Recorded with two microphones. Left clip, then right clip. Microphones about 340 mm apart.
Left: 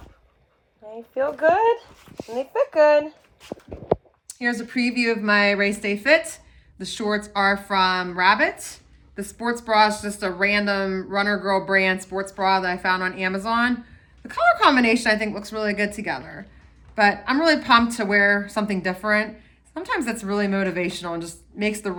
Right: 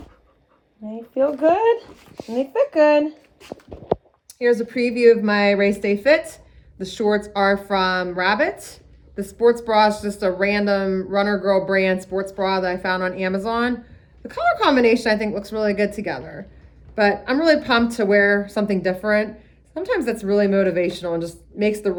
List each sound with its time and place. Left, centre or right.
0.9 s speech: left
1.8 s dog: centre
3.8 s a woman's voice: centre